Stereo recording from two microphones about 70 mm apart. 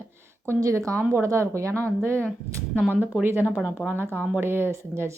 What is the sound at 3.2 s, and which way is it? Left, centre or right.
A woman's voice, right.